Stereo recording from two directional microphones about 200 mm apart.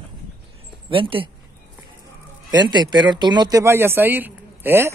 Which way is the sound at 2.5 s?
20° right (ahead or behind).